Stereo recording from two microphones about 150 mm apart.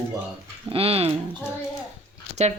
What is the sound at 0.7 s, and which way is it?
Speech, 40° right (ahead or behind).